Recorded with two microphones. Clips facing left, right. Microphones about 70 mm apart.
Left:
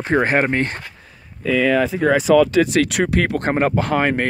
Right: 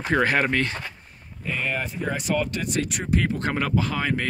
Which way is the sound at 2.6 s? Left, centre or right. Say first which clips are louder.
Left 9 dB; left.